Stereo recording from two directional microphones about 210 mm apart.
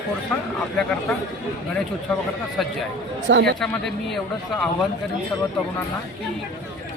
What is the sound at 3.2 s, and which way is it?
Speech, 60° right (ahead or behind).